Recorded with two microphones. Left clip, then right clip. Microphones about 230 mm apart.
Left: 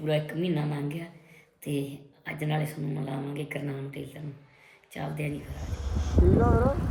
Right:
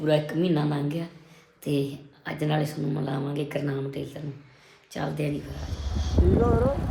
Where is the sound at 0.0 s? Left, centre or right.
Centre.